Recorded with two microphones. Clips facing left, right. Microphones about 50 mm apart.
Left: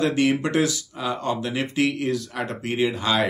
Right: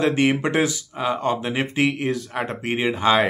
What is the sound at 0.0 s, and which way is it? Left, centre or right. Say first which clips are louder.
Speech: right 2 dB; right.